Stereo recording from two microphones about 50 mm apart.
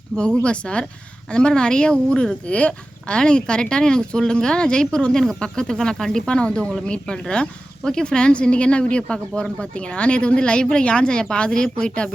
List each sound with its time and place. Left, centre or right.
0.1 s speech: right
0.4 s a woman's voice: left